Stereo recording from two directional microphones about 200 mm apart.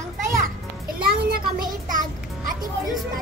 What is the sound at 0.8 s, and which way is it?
Music, 50° right (ahead or behind).